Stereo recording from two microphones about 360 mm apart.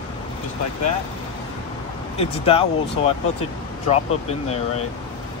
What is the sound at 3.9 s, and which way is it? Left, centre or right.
Speech, centre.